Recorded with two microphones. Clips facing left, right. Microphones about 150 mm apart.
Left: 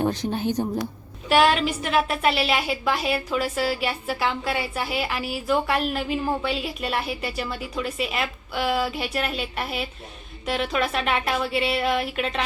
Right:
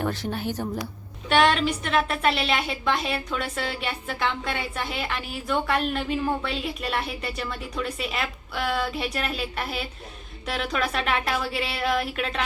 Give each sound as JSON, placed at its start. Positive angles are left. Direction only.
{"t": 0.0, "sound": "speech", "side_deg": 20}
{"t": 1.3, "sound": "a woman's voice", "side_deg": 5}